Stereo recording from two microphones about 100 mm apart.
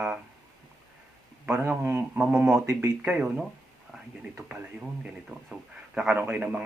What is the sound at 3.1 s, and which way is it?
Speech, 5° right (ahead or behind).